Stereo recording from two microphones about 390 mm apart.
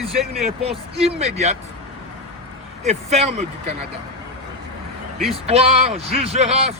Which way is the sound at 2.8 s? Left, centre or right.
Centre.